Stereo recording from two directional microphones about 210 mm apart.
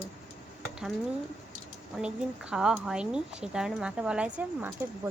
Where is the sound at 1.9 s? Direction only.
5° right (ahead or behind).